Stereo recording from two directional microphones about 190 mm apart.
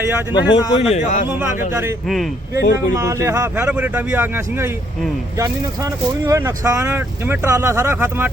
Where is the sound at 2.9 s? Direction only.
15° right (ahead or behind).